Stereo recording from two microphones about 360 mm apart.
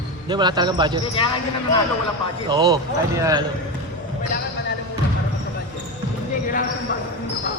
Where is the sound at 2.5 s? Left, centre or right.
Centre.